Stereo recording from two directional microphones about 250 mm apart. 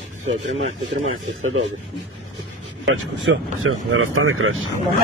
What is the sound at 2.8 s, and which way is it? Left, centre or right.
Speech, right.